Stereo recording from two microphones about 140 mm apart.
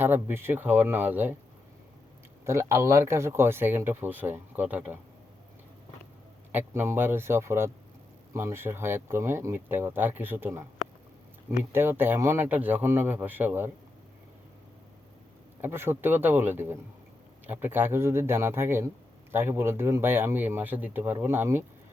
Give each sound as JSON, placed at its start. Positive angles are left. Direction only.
{"t": 0.0, "sound": "speech", "side_deg": -15}
{"t": 2.4, "sound": "speech", "side_deg": -20}
{"t": 6.5, "sound": "speech", "side_deg": -15}
{"t": 11.7, "sound": "speech", "side_deg": -15}
{"t": 15.6, "sound": "speech", "side_deg": -15}